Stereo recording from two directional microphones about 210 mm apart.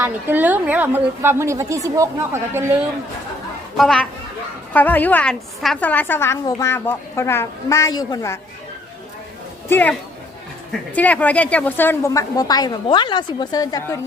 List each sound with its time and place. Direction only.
0.0 s a woman's voice: 10° right (ahead or behind)
3.8 s a woman's voice: 5° left (ahead or behind)
9.6 s a woman's voice: 10° left (ahead or behind)